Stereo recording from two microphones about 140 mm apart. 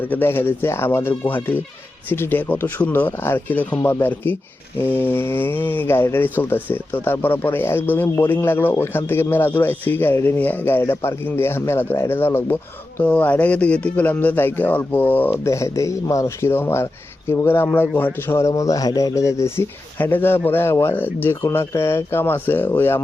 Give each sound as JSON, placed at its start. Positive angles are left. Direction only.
{"t": 0.1, "sound": "speech", "side_deg": 15}